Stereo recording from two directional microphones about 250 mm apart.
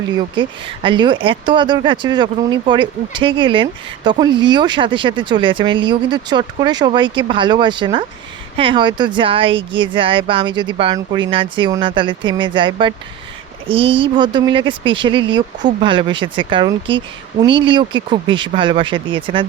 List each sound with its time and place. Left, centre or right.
0.3 s speech: centre